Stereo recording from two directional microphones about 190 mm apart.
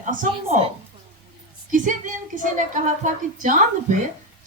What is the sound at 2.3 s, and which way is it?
A woman's voice, 45° right (ahead or behind).